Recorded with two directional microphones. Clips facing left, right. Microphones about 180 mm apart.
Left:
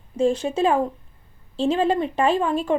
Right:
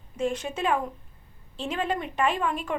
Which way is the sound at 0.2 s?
30° left (ahead or behind).